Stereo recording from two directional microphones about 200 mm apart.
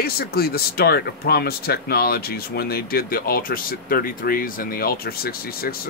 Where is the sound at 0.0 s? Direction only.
50° left (ahead or behind).